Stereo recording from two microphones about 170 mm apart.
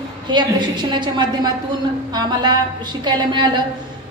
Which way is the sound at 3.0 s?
25° right (ahead or behind).